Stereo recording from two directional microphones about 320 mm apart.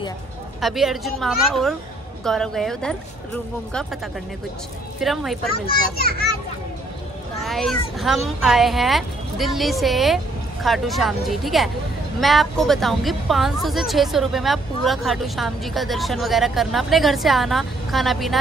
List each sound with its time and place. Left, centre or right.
0.6 s speech: centre
5.0 s speech: centre
5.5 s a child's voice: left
7.3 s speech: centre